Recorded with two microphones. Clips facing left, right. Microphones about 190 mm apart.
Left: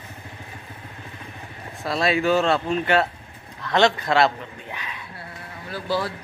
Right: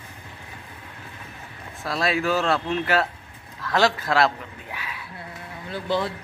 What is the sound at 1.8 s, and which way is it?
Speech, centre (ahead or behind).